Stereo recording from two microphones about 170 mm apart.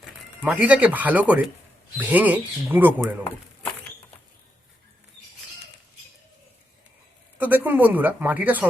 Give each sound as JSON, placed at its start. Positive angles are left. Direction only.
{"t": 0.4, "sound": "speech", "side_deg": -10}
{"t": 7.3, "sound": "speech", "side_deg": -10}